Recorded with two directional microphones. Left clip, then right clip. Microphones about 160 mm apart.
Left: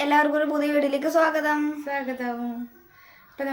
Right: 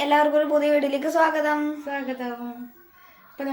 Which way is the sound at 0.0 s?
20° left (ahead or behind).